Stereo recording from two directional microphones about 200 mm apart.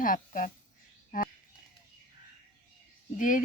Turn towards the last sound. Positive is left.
turn(degrees=40)  # may be behind; listen again after turning